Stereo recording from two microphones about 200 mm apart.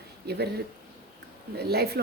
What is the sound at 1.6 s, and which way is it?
Speech, 55° right (ahead or behind).